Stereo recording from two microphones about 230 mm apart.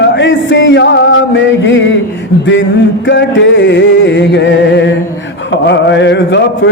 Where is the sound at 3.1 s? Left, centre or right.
Left.